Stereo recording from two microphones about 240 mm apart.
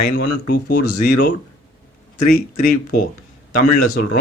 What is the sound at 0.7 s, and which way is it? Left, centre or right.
Speech, left.